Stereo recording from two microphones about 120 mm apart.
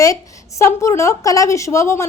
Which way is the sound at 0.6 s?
25° left (ahead or behind).